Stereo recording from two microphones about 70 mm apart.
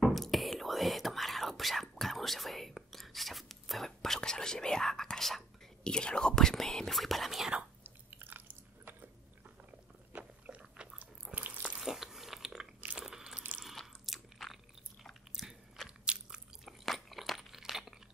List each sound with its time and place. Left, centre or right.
0.0 s whispering: centre
7.8 s chewing: right
10.1 s biting: centre
11.3 s a sound: right
11.8 s biting: centre
13.7 s chewing: centre
15.0 s biting: centre
16.6 s crunch: centre